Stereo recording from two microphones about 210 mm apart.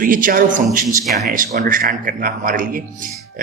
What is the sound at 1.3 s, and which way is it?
A man's voice, 40° right (ahead or behind).